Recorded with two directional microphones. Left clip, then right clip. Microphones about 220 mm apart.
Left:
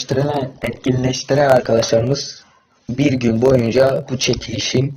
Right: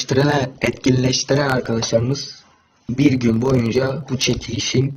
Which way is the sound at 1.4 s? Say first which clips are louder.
Left 7 dB; 5° left (ahead or behind).